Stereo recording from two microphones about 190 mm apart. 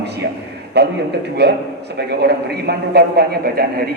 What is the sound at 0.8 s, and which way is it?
A man's voice, 60° right (ahead or behind).